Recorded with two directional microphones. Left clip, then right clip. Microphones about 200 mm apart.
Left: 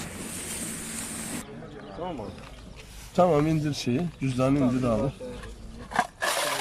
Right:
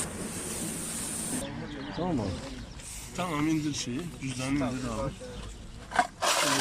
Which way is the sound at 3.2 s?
60° left (ahead or behind).